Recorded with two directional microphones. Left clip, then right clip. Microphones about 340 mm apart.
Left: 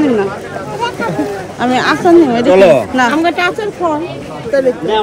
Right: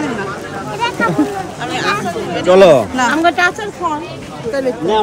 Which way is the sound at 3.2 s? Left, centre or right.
Centre.